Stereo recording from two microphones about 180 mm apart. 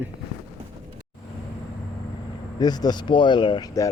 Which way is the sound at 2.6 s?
20° left (ahead or behind).